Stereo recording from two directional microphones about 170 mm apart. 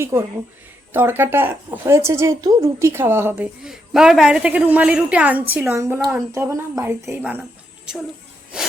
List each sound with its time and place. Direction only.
0.0 s speech: 15° right (ahead or behind)